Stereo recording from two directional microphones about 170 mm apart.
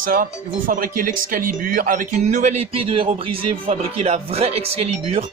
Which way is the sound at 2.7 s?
30° right (ahead or behind).